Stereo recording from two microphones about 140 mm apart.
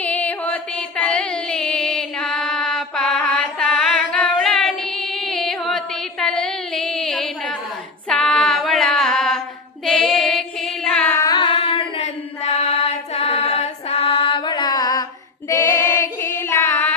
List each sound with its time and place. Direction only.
0.0 s a sound: 10° left (ahead or behind)
8.0 s female singing: 5° left (ahead or behind)
11.2 s singing: 35° left (ahead or behind)
15.4 s female singing: 20° left (ahead or behind)